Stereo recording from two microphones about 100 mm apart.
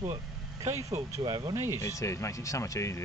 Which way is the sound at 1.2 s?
45° right (ahead or behind).